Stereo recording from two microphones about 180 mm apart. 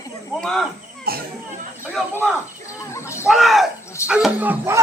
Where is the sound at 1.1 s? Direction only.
55° right (ahead or behind).